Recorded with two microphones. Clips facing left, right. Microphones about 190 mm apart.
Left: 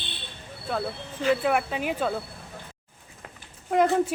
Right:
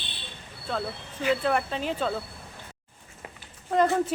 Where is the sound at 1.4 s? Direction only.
10° left (ahead or behind).